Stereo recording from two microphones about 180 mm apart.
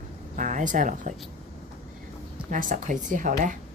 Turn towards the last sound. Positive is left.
turn(degrees=-45)  # may be behind; listen again after turning